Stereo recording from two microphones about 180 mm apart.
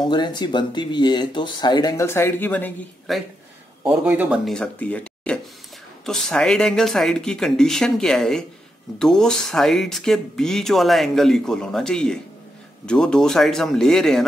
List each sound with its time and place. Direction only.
0.0 s speech: 25° left (ahead or behind)
3.1 s speech: centre (ahead or behind)
4.5 s speech: 5° left (ahead or behind)